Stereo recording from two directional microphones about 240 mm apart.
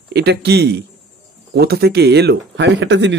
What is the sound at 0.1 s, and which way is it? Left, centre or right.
Speech, right.